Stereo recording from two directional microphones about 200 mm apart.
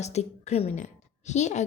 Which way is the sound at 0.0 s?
35° left (ahead or behind).